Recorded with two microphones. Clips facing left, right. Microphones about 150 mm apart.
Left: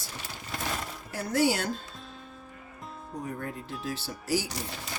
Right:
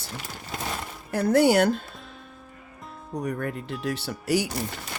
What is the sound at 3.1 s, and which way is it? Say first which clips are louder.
Speech: right 7 dB; 75° right (ahead or behind).